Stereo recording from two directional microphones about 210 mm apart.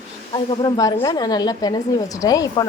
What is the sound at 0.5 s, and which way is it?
A woman's voice, 20° left (ahead or behind).